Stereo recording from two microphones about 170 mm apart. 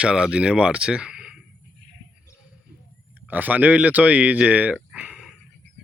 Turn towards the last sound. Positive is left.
turn(degrees=-5)  # may be behind; listen again after turning